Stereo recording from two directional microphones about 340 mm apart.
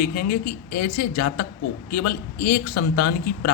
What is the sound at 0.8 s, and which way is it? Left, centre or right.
A man's voice, left.